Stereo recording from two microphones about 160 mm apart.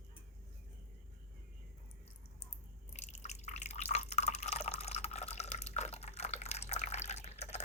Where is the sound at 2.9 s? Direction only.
45° left (ahead or behind).